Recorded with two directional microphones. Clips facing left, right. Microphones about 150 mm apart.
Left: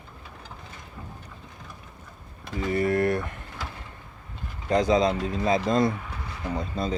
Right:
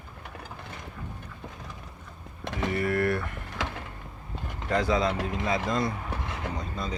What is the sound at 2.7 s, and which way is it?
Mechanisms, 25° left (ahead or behind).